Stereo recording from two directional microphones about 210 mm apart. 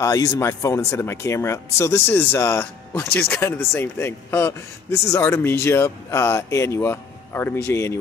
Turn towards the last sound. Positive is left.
turn(degrees=10)  # may be behind; listen again after turning